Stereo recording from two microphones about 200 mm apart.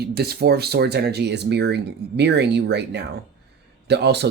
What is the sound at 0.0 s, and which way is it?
Speech, 50° right (ahead or behind).